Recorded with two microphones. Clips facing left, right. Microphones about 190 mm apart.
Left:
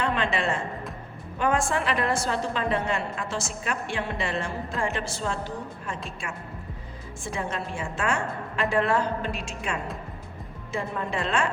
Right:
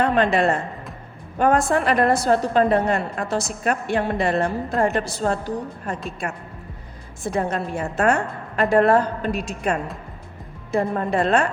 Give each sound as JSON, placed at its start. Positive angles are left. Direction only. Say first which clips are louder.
{"t": 0.0, "sound": "a woman's voice", "louder": "right 8 dB", "side_deg": -40}
{"t": 7.2, "sound": "a woman's voice", "louder": "right 8 dB", "side_deg": -40}